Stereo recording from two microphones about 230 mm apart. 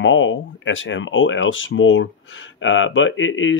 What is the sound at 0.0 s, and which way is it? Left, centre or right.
Speech, left.